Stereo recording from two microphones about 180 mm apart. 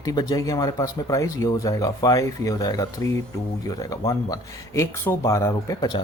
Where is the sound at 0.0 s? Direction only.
20° left (ahead or behind).